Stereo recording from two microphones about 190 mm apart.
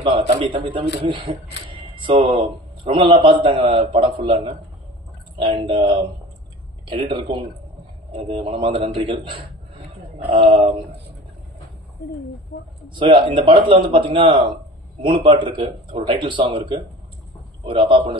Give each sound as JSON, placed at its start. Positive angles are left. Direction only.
{"t": 0.0, "sound": "a man's voice", "side_deg": -25}
{"t": 12.8, "sound": "speech", "side_deg": -25}